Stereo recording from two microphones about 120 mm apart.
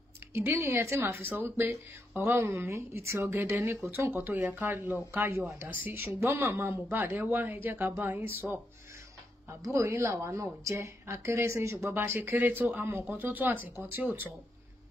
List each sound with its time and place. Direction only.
0.3 s a woman's voice: 20° right (ahead or behind)
9.5 s a woman's voice: 25° right (ahead or behind)